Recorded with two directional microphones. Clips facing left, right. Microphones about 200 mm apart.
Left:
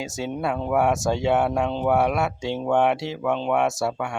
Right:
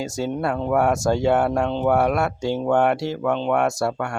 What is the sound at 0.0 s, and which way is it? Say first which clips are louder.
Speech: right 3 dB; centre (ahead or behind).